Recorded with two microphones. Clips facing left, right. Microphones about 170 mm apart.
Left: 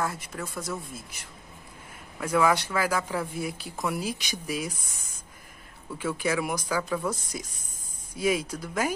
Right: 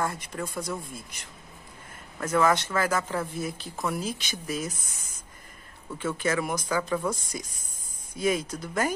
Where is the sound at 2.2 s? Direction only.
10° left (ahead or behind).